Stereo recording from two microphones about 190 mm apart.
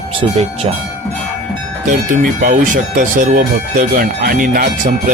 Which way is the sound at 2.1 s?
45° right (ahead or behind).